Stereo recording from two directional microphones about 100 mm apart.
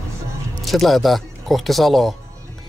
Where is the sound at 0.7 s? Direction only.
Centre (ahead or behind).